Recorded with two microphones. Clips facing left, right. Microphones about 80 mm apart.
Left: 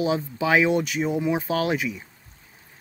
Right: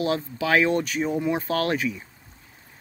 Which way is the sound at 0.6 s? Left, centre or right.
Centre.